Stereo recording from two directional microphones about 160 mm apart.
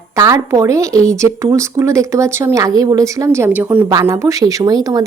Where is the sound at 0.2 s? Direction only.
20° right (ahead or behind).